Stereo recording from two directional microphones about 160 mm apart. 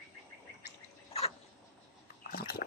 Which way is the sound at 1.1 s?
40° left (ahead or behind).